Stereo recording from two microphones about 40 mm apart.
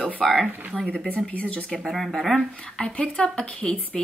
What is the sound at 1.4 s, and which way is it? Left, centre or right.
Speech, left.